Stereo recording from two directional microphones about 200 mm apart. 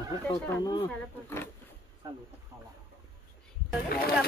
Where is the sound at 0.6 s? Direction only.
20° left (ahead or behind).